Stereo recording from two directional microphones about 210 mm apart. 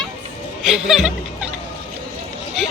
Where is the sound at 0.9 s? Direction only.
Centre (ahead or behind).